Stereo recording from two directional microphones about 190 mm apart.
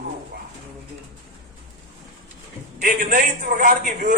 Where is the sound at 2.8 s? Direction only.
45° right (ahead or behind).